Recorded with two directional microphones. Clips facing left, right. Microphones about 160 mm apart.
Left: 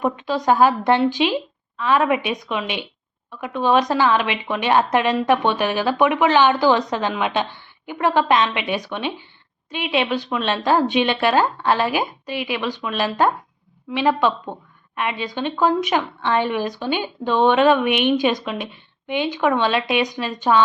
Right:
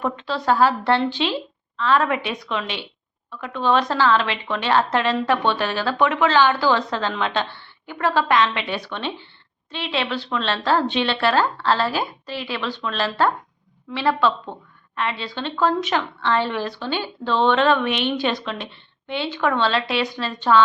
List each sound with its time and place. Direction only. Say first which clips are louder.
0.0 s a woman's voice: left 3 dB; 15° left (ahead or behind)